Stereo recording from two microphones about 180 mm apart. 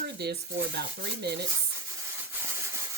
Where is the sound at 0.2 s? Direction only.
65° right (ahead or behind).